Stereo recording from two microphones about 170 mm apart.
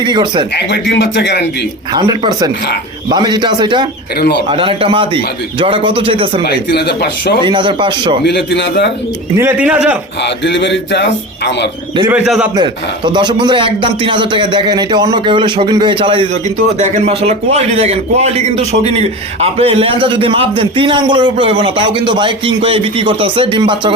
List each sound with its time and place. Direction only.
0.0 s a man's voice: 25° right (ahead or behind)
0.5 s speech: 85° left
1.9 s a man's voice: 25° right (ahead or behind)
6.4 s speech: 75° left (ahead or behind)
7.4 s a man's voice: 30° right (ahead or behind)
8.2 s speech: 85° left
9.4 s speech: 10° right (ahead or behind)
10.2 s speech: 90° left
12.2 s a man's voice: centre (ahead or behind)
13.1 s a man's voice: 25° right (ahead or behind)